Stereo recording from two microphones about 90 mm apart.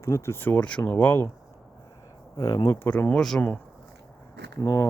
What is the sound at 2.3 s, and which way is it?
Speech, 45° left (ahead or behind).